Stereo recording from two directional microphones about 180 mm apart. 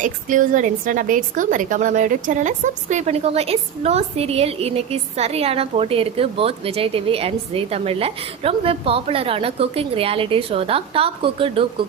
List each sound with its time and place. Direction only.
0.0 s a woman's voice: 45° right (ahead or behind); by 11.6 s 30° right (ahead or behind)